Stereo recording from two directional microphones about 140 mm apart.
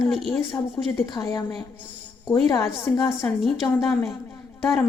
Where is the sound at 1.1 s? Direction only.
30° left (ahead or behind).